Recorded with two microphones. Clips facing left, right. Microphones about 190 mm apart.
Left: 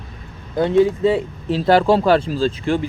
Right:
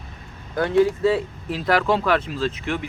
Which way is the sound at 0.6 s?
20° left (ahead or behind).